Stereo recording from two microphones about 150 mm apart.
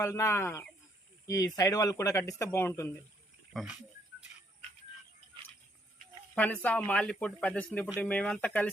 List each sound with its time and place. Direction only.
0.0 s speech: 20° left (ahead or behind)
3.5 s speech: centre (ahead or behind)
6.3 s speech: 10° left (ahead or behind)